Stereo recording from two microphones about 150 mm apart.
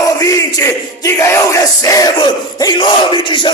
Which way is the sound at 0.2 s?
25° left (ahead or behind).